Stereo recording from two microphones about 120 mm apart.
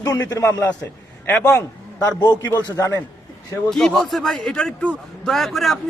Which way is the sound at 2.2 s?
35° left (ahead or behind).